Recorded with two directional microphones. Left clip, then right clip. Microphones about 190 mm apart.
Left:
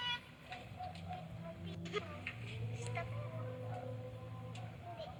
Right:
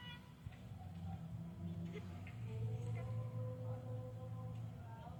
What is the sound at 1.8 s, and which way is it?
Music, 45° left (ahead or behind).